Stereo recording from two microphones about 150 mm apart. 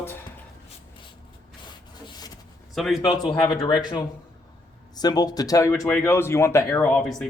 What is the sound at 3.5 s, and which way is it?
Speech, 30° left (ahead or behind).